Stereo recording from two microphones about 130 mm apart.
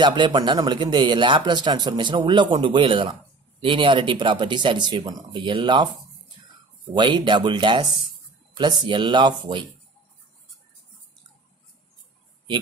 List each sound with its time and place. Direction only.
0.0 s speech: 35° right (ahead or behind)
6.9 s speech: 35° right (ahead or behind)